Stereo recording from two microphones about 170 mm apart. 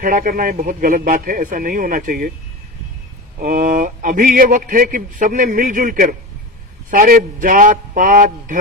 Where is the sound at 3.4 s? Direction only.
55° right (ahead or behind).